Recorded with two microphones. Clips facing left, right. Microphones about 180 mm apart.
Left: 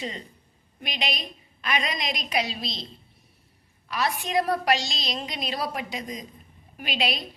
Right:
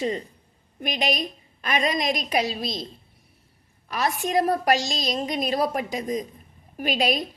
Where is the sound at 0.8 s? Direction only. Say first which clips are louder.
Right 7 dB; 45° right (ahead or behind).